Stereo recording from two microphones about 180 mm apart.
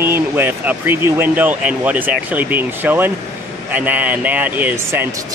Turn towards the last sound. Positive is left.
turn(degrees=-15)  # may be behind; listen again after turning